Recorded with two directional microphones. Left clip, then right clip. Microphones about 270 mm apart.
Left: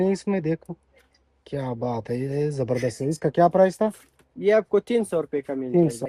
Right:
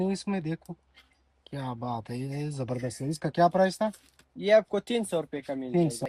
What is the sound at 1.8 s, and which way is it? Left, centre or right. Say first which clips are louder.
Speech: left 5 dB; left.